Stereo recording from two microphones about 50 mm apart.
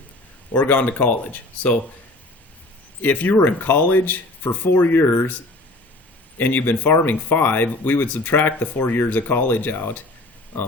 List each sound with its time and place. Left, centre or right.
0.5 s speech: left
3.0 s speech: left
6.3 s speech: left